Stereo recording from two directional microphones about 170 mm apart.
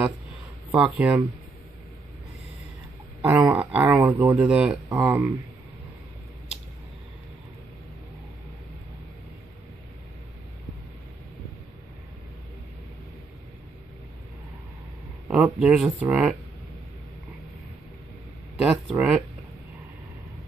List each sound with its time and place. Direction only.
0.7 s speech: 5° right (ahead or behind)
3.3 s speech: 10° right (ahead or behind)
15.2 s speech: centre (ahead or behind)
18.6 s speech: 5° right (ahead or behind)